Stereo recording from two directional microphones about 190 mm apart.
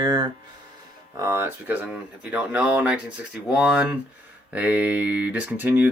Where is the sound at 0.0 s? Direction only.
20° right (ahead or behind).